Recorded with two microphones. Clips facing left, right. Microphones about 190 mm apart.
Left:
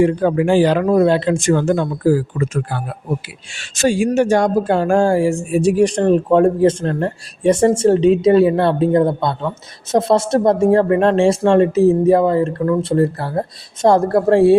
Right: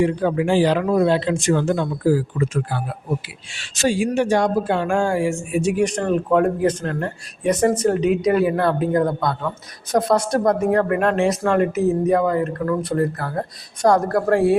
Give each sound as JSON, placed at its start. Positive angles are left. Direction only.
{"t": 0.0, "sound": "speech", "side_deg": 50}